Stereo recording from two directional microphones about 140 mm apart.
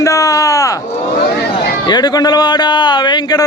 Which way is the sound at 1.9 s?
30° left (ahead or behind).